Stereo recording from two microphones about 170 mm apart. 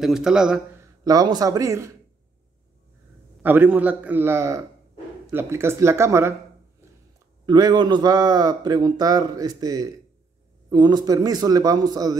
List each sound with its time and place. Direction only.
0.0 s a man's voice: 5° right (ahead or behind)
1.0 s a man's voice: 20° right (ahead or behind)
3.4 s a man's voice: 10° right (ahead or behind)
7.4 s a man's voice: 25° right (ahead or behind)